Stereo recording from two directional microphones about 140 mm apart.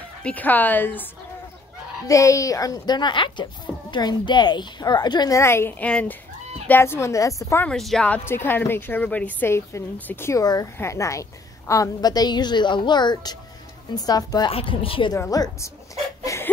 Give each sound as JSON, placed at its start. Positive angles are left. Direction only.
{"t": 0.2, "sound": "a woman's voice", "side_deg": 10}
{"t": 2.0, "sound": "a woman's voice", "side_deg": 20}
{"t": 5.4, "sound": "a woman's voice", "side_deg": 20}
{"t": 7.6, "sound": "speech", "side_deg": 0}
{"t": 14.5, "sound": "a woman's voice", "side_deg": 40}
{"t": 15.1, "sound": "speech", "side_deg": 25}
{"t": 16.3, "sound": "a sound", "side_deg": 25}